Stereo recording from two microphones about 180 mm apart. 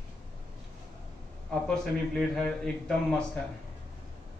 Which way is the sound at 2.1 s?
5° left (ahead or behind).